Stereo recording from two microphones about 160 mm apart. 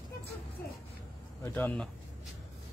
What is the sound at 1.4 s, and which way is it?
Speech, 10° left (ahead or behind).